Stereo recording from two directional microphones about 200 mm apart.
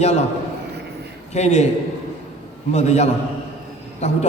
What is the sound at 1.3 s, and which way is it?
Speech, 35° left (ahead or behind).